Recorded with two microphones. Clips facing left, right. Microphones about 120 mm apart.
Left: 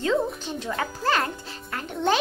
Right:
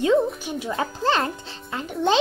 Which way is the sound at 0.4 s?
10° right (ahead or behind).